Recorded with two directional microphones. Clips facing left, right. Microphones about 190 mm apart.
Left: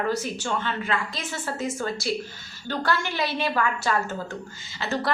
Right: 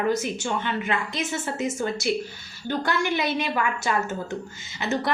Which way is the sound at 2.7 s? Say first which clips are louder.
Right 2 dB; 15° right (ahead or behind).